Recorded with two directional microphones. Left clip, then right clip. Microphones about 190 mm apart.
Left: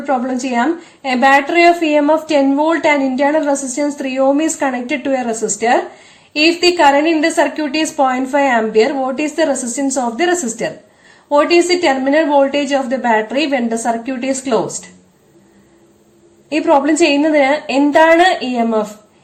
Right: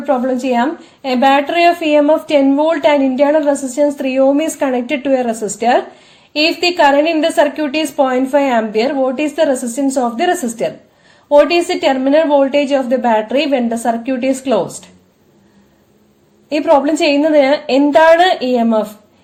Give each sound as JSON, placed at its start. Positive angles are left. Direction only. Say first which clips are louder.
{"t": 0.0, "sound": "a woman's voice", "louder": "right 2 dB", "side_deg": -35}
{"t": 16.5, "sound": "a woman's voice", "louder": "right 1 dB", "side_deg": -30}